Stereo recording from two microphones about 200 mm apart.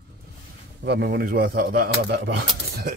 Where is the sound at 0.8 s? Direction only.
55° right (ahead or behind).